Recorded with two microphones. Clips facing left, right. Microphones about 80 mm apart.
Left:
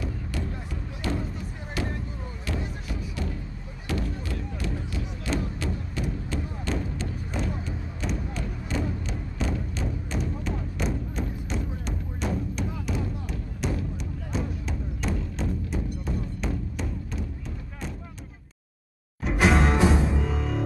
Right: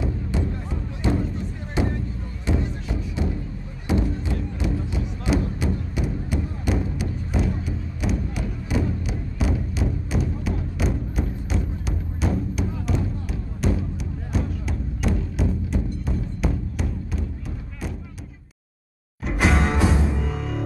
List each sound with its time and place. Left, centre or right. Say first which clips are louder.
0.0 s music: right 6 dB; right
1.8 s fireworks: right 7 dB; right
2.9 s music: right 5 dB; right; by 12.6 s centre
12.8 s a sound: right 4 dB; centre
14.3 s music: right 3 dB; centre
19.2 s music: even; centre